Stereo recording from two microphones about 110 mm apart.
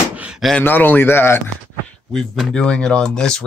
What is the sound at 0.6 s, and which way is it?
Speech, 20° left (ahead or behind).